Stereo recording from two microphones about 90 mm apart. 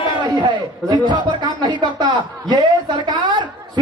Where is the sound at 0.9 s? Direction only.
55° right (ahead or behind).